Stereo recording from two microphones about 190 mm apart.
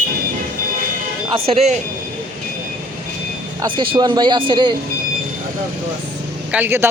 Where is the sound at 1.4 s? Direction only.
35° right (ahead or behind).